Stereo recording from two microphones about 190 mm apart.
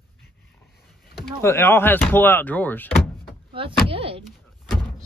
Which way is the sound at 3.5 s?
30° right (ahead or behind).